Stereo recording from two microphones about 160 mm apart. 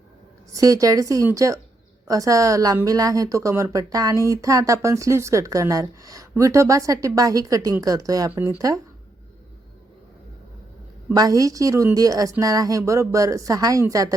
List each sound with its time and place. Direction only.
0.5 s a woman's voice: 20° right (ahead or behind)
11.1 s a woman's voice: 20° right (ahead or behind)